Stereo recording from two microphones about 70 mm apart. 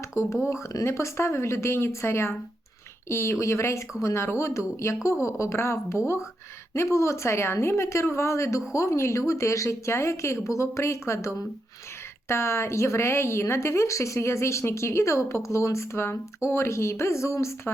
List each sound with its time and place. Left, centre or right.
0.1 s a woman's voice: left
0.9 s a woman's voice: left